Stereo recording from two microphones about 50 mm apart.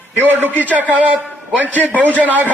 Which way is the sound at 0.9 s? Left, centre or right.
Right.